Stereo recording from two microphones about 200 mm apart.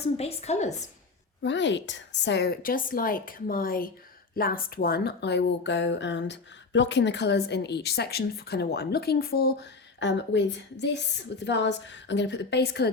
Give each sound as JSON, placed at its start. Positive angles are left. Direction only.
{"t": 0.0, "sound": "a woman's voice", "side_deg": 30}
{"t": 1.4, "sound": "a woman's voice", "side_deg": 65}